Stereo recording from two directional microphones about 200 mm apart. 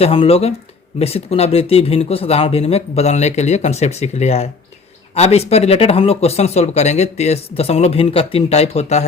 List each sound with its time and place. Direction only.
0.0 s speech: 30° left (ahead or behind)